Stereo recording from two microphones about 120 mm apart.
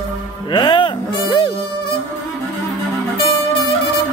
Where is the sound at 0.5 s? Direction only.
40° left (ahead or behind).